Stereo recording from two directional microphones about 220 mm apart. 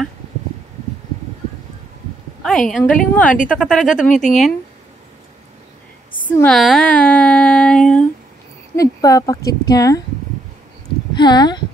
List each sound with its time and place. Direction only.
2.4 s a woman's voice: 5° left (ahead or behind)
4.1 s speech: 35° left (ahead or behind)
6.2 s a sound: 5° left (ahead or behind)
8.7 s speech: 15° left (ahead or behind)
11.1 s speech: 20° left (ahead or behind)